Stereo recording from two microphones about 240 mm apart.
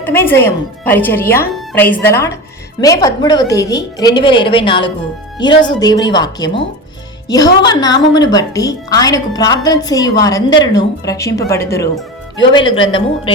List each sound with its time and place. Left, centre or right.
0.0 s a woman's voice: centre